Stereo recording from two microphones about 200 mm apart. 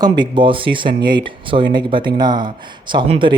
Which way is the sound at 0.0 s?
20° right (ahead or behind).